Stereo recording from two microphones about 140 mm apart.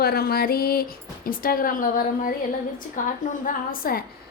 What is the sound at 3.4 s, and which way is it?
Speech, 90° left.